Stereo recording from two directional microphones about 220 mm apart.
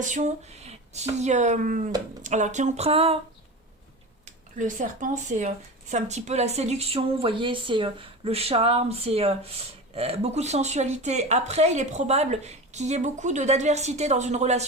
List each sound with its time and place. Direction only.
0.0 s speech: 35° right (ahead or behind)
4.3 s speech: 35° right (ahead or behind)